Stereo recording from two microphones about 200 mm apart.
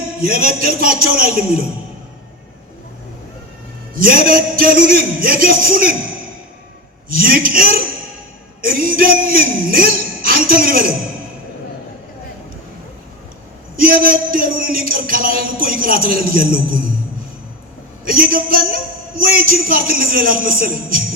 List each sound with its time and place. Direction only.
0.2 s a man's voice: 45° right (ahead or behind)
3.9 s a man's voice: 45° right (ahead or behind)
7.1 s a man's voice: 45° right (ahead or behind)
13.7 s a man's voice: 45° right (ahead or behind)
18.0 s a man's voice: 45° right (ahead or behind)